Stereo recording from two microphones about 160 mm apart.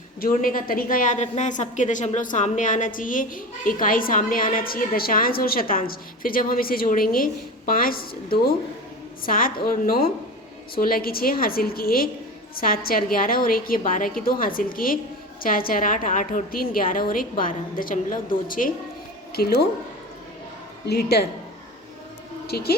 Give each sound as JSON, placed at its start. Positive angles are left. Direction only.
{"t": 0.2, "sound": "a woman's voice", "side_deg": 60}
{"t": 19.3, "sound": "a woman's voice", "side_deg": 80}
{"t": 20.8, "sound": "a woman's voice", "side_deg": 90}
{"t": 22.4, "sound": "speech", "side_deg": 80}